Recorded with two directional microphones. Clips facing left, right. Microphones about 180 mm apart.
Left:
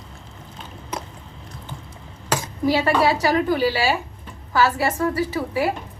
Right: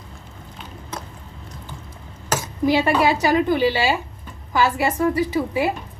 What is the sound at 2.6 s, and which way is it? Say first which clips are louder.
A woman's voice: right 1 dB; 20° right (ahead or behind).